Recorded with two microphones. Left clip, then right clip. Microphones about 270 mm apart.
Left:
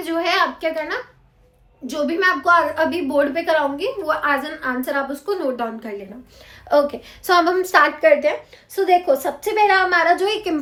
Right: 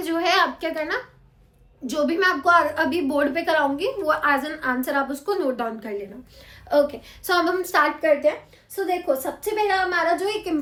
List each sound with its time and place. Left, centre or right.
0.0 s a woman's voice: centre
6.7 s a woman's voice: left